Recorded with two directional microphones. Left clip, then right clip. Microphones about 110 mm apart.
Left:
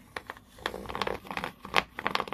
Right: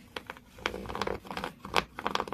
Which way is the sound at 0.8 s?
25° right (ahead or behind).